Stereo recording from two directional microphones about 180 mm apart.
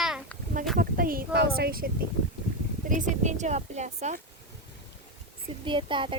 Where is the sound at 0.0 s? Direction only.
Centre (ahead or behind).